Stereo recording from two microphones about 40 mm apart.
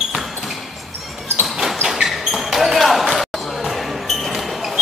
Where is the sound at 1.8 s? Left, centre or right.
Centre.